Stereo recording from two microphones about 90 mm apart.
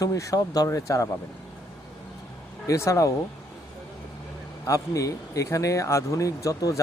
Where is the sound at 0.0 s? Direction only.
35° left (ahead or behind).